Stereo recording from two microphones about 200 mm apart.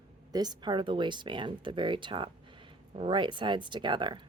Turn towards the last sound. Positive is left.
turn(degrees=-25)  # may be behind; listen again after turning